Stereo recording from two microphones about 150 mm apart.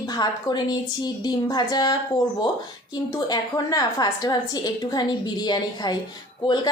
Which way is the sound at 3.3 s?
25° left (ahead or behind).